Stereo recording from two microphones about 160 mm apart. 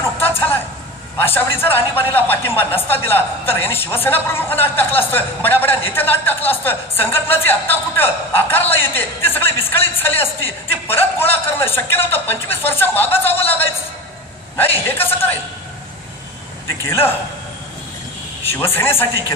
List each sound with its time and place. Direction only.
0.2 s a sound: 15° left (ahead or behind)
1.1 s a woman's voice: 15° left (ahead or behind)
14.9 s a woman's voice: 15° left (ahead or behind)
16.6 s a woman's voice: 15° left (ahead or behind)
18.5 s a woman's voice: 15° left (ahead or behind)